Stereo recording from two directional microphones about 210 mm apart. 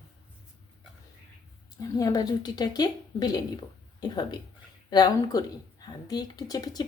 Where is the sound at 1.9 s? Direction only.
15° left (ahead or behind).